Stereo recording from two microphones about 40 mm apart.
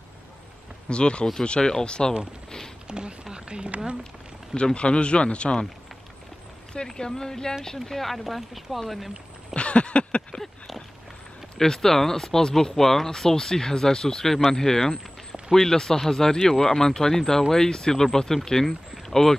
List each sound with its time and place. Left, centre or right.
0.8 s speech: left
2.9 s speech: right
4.6 s speech: left
6.9 s speech: centre
9.5 s a sound: left
11.5 s speech: centre